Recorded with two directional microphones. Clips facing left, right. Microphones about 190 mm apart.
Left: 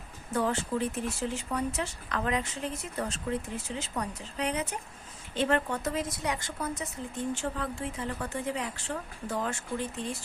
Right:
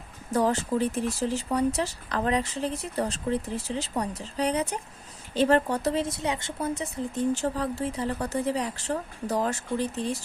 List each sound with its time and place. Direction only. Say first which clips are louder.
0.3 s speech: right 5 dB; 40° right (ahead or behind)